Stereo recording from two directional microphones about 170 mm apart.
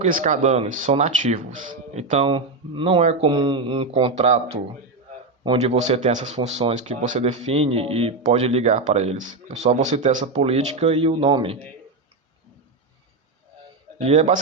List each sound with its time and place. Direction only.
0.0 s speech: 50° right (ahead or behind); by 11.5 s 30° right (ahead or behind)
14.0 s speech: 40° right (ahead or behind)